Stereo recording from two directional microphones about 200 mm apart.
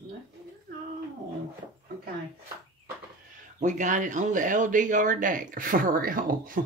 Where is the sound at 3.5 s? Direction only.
40° right (ahead or behind).